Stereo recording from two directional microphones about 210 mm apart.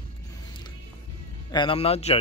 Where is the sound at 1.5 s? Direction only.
25° left (ahead or behind).